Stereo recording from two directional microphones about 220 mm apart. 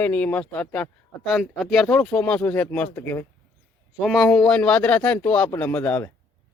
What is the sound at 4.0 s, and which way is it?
A man's voice, centre (ahead or behind).